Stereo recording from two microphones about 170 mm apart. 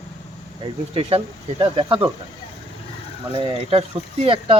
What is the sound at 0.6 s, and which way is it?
Speech, 35° right (ahead or behind).